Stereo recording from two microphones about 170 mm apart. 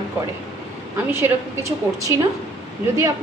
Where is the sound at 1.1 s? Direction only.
15° right (ahead or behind).